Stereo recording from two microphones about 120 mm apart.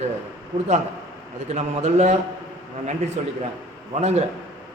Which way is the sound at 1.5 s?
70° right (ahead or behind).